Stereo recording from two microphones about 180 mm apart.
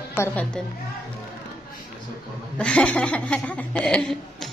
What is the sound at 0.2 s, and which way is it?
Speech, 5° left (ahead or behind).